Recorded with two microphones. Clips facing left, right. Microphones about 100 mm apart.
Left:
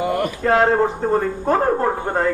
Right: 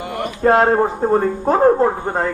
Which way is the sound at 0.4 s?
30° right (ahead or behind).